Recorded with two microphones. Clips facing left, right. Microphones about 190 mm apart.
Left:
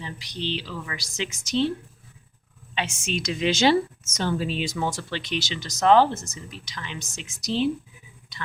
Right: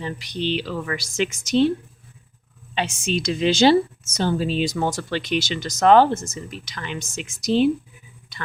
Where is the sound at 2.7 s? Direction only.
35° right (ahead or behind).